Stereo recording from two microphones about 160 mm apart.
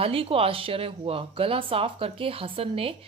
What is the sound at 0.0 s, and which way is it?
A woman's voice, 35° right (ahead or behind).